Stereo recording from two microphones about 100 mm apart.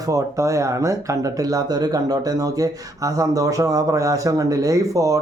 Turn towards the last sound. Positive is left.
turn(degrees=-35)  # may be behind; listen again after turning